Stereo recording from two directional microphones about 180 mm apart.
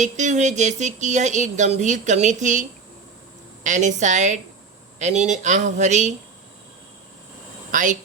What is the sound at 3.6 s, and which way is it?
A woman's voice, 40° right (ahead or behind).